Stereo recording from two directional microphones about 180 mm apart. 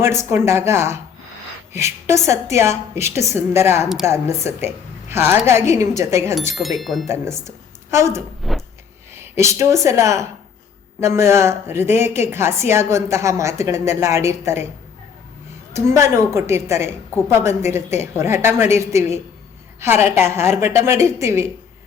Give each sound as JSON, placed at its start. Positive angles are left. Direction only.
{"t": 0.0, "sound": "a woman's voice", "side_deg": -15}
{"t": 6.5, "sound": "speech", "side_deg": 0}
{"t": 7.9, "sound": "speech", "side_deg": -15}
{"t": 8.4, "sound": "speech", "side_deg": 0}
{"t": 9.1, "sound": "a woman's voice", "side_deg": -15}
{"t": 15.7, "sound": "a woman's voice", "side_deg": -15}